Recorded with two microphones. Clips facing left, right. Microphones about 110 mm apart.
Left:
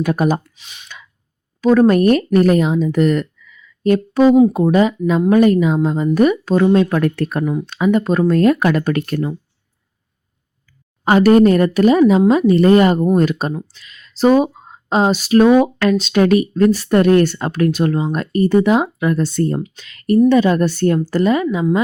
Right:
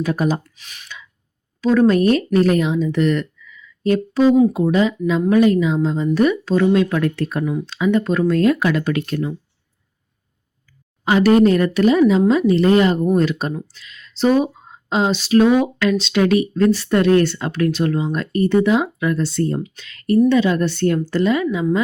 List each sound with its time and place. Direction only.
0.0 s speech: 55° left (ahead or behind)
0.6 s a woman's voice: 25° left (ahead or behind)
1.6 s speech: 45° left (ahead or behind)
7.2 s speech: 55° left (ahead or behind)
7.9 s speech: 40° left (ahead or behind)
11.0 s speech: 45° left (ahead or behind)
19.1 s speech: 45° left (ahead or behind)
21.4 s a woman's voice: 30° left (ahead or behind)